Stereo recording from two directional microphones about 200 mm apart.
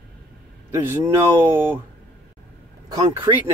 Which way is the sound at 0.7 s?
15° right (ahead or behind).